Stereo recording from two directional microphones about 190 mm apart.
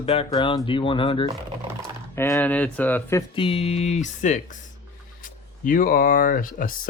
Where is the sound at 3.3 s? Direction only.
30° left (ahead or behind); by 6.7 s 45° left (ahead or behind).